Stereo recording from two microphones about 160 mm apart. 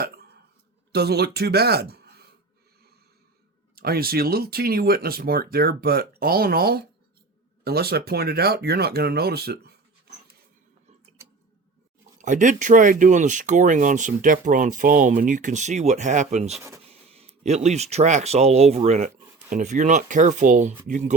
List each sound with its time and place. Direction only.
0.9 s speech: 90° right
3.8 s speech: 70° right (ahead or behind)
12.2 s speech: 50° right (ahead or behind)